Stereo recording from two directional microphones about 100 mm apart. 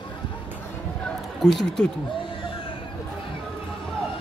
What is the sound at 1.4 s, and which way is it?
Speech, 5° left (ahead or behind).